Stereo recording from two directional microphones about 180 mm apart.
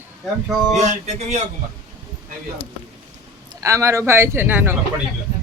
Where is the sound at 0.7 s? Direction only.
40° right (ahead or behind).